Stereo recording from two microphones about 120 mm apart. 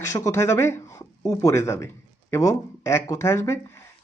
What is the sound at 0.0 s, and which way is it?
Speech, 25° left (ahead or behind).